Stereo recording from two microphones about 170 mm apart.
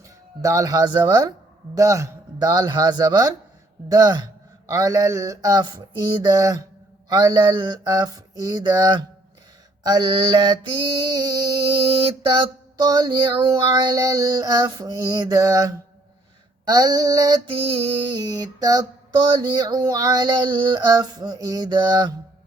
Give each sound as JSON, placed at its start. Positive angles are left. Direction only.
{"t": 0.4, "sound": "mantra", "side_deg": -20}